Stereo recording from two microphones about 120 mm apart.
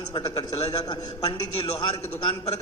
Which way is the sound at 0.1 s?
35° left (ahead or behind).